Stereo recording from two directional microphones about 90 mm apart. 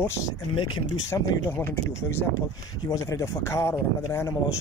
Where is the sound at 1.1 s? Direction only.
35° left (ahead or behind).